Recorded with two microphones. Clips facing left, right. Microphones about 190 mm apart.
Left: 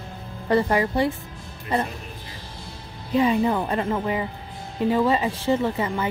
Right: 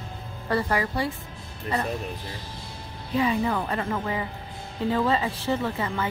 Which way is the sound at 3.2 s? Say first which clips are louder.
Left 4 dB; 25° left (ahead or behind).